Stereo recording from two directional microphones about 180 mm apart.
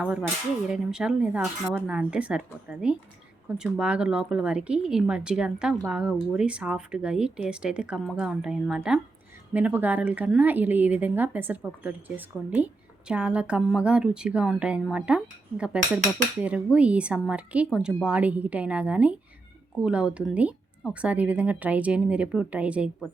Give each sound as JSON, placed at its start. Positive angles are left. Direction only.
{"t": 0.0, "sound": "a woman's voice", "side_deg": -5}